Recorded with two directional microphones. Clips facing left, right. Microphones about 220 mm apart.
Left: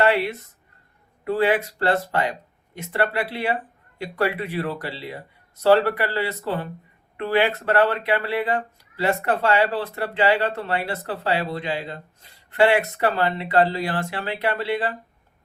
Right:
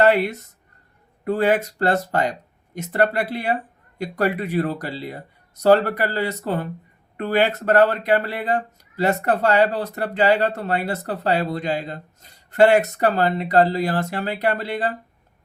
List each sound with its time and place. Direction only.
0.0 s speech: 45° right (ahead or behind)